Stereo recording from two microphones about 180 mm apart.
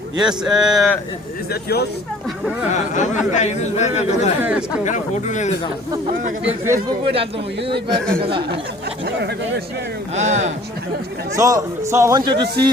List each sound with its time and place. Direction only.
0.2 s speech: 5° right (ahead or behind)
2.7 s speech: 45° left (ahead or behind)
7.0 s speech: 30° right (ahead or behind)
7.9 s speech: 5° left (ahead or behind)
8.2 s speech: 30° right (ahead or behind)
9.0 s speech: 70° right (ahead or behind)
10.2 s speech: 40° right (ahead or behind)
11.3 s a man's voice: 20° right (ahead or behind)
12.3 s speech: 65° right (ahead or behind)